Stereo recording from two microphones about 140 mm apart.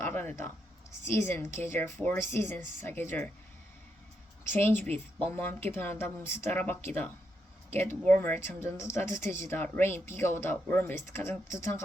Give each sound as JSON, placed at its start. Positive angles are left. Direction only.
{"t": 0.0, "sound": "speech", "side_deg": 15}
{"t": 4.4, "sound": "speech", "side_deg": 15}